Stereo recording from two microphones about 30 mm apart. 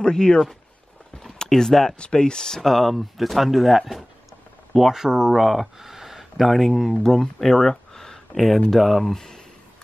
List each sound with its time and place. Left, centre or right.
0.0 s speech: left
1.5 s speech: centre
2.0 s speech: left
2.6 s speech: centre
5.3 s speech: centre
7.0 s speech: centre
8.6 s speech: centre
9.1 s speech: centre